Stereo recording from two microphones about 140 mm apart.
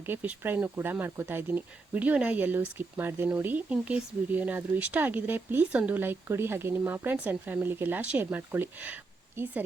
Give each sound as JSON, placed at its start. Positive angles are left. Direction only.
{"t": 0.0, "sound": "speech", "side_deg": -15}